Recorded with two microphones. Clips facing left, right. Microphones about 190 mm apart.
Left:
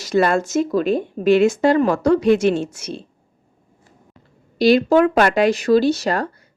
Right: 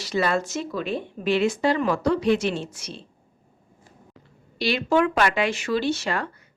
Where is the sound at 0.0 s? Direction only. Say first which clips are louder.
Left 6 dB; 50° left (ahead or behind).